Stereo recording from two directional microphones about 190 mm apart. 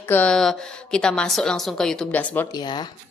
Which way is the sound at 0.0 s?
10° left (ahead or behind).